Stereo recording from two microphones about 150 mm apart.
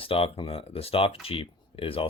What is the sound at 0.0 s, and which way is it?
Speech, 40° left (ahead or behind).